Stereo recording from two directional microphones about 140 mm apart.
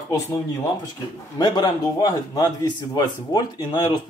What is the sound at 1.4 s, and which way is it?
A man's voice, 30° left (ahead or behind).